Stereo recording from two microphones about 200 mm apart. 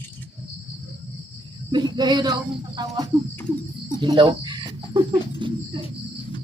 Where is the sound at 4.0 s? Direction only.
25° right (ahead or behind).